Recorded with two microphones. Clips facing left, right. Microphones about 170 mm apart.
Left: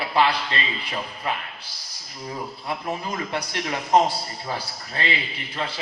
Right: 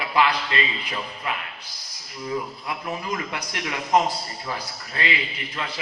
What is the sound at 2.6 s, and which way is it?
A man's voice, 30° left (ahead or behind).